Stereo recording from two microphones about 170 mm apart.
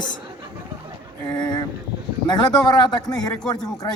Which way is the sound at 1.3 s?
25° left (ahead or behind).